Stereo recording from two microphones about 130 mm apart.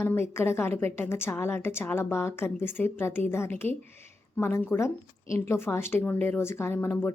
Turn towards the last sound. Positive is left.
turn(degrees=15)  # may be behind; listen again after turning